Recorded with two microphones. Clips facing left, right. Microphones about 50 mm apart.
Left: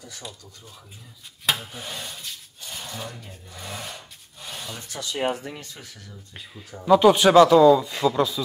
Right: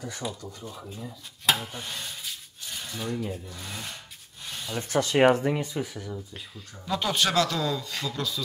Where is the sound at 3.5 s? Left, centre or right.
Centre.